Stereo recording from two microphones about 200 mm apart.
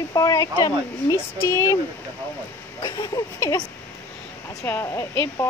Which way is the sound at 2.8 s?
20° left (ahead or behind).